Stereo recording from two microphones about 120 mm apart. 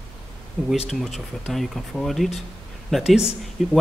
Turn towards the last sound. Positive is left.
turn(degrees=-5)  # may be behind; listen again after turning